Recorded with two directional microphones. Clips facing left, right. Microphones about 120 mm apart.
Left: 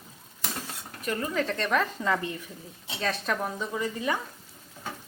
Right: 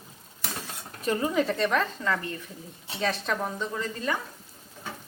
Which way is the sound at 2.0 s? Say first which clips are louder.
Left 1 dB; 15° left (ahead or behind).